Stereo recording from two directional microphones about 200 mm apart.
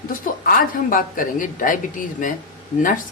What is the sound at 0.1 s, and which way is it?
A woman's voice, 45° left (ahead or behind).